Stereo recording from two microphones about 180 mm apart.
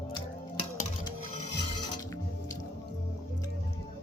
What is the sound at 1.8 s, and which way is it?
Music, 25° left (ahead or behind).